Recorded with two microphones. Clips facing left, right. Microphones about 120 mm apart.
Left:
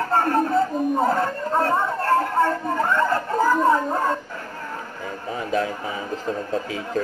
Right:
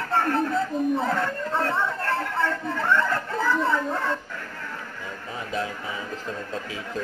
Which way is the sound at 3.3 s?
45° left (ahead or behind).